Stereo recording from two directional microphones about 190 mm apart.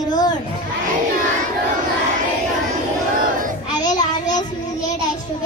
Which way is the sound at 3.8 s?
40° left (ahead or behind).